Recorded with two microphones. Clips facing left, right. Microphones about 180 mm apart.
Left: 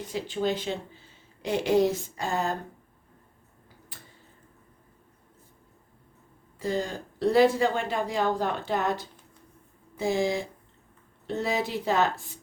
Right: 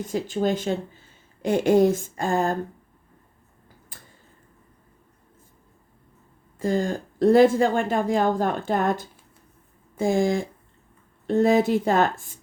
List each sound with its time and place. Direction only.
0.0 s speech: 45° right (ahead or behind)
3.9 s tick-tock: 45° right (ahead or behind)
6.6 s speech: 50° right (ahead or behind)